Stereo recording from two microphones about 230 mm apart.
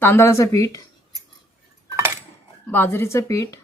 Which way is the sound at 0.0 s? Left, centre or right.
Centre.